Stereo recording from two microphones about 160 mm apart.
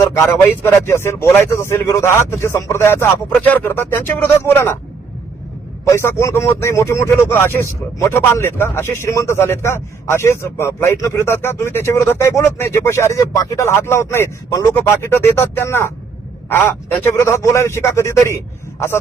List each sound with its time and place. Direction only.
0.6 s speech: 15° left (ahead or behind)
5.9 s speech: 15° left (ahead or behind)